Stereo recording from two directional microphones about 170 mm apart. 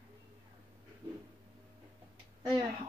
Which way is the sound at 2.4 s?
25° right (ahead or behind).